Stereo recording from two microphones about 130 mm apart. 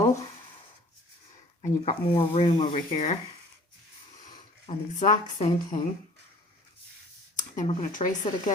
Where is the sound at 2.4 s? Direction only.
35° left (ahead or behind).